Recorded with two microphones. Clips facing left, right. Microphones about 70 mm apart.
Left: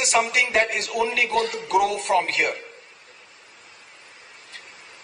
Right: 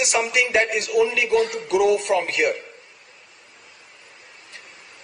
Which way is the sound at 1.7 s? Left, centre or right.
Left.